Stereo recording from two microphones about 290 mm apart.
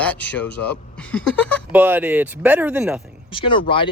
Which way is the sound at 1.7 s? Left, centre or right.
Centre.